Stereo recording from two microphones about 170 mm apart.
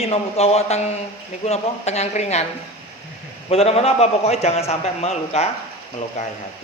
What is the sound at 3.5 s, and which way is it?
Speech, 35° left (ahead or behind).